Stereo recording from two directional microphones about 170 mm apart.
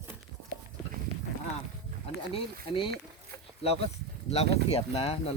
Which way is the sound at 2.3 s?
30° left (ahead or behind).